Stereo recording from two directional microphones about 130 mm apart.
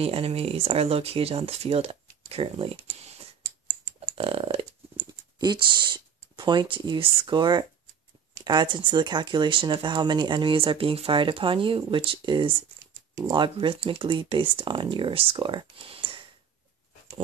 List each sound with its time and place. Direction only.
0.0 s speech: 50° right (ahead or behind)
4.1 s a sound: 45° right (ahead or behind)
5.4 s speech: 35° right (ahead or behind)